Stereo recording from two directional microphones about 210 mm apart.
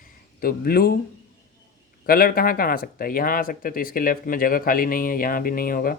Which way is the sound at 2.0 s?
45° left (ahead or behind).